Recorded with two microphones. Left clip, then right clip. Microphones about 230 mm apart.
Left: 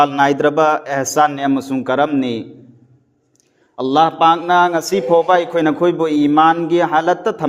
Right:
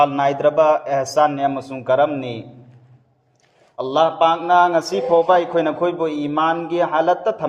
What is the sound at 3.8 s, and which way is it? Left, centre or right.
A man's voice, left.